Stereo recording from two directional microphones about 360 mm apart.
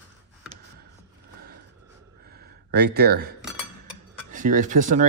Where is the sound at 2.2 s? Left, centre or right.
Right.